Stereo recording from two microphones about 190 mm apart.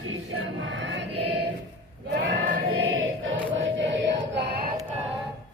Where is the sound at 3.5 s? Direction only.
75° right (ahead or behind).